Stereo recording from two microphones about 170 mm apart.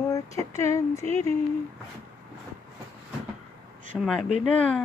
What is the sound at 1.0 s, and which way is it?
Speech, 35° right (ahead or behind).